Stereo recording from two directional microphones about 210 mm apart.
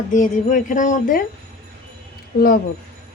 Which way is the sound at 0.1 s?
35° left (ahead or behind).